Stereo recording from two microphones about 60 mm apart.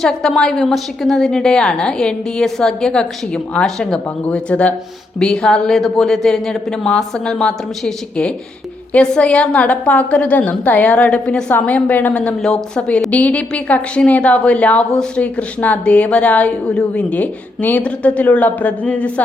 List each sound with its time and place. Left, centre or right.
0.0 s a woman's voice: centre; by 12.3 s left
12.4 s a woman's voice: centre
13.1 s a woman's voice: left